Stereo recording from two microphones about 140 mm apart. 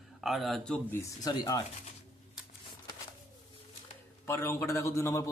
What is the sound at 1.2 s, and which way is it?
Speech, 30° left (ahead or behind).